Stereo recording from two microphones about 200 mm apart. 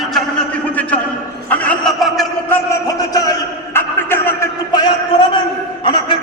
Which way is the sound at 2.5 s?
15° left (ahead or behind).